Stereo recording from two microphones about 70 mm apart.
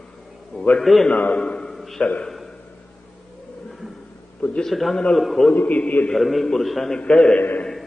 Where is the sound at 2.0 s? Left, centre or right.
Centre.